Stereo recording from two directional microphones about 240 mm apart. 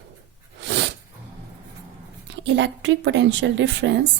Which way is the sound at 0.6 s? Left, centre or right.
Right.